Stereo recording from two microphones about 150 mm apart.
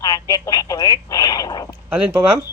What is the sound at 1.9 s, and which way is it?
Speech, 10° right (ahead or behind).